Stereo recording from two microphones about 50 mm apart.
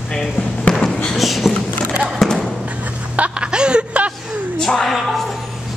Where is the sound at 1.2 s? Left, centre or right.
Centre.